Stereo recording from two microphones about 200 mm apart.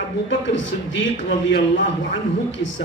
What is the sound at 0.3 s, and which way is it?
Speech, 65° left (ahead or behind).